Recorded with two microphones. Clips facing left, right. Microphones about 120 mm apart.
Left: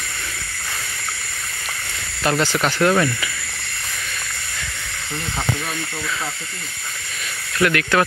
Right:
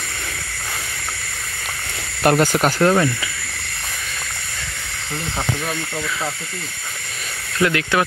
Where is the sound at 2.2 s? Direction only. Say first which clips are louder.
Right 4 dB; 50° right (ahead or behind).